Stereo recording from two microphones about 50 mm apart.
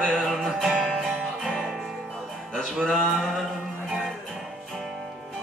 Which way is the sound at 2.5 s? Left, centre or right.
Centre.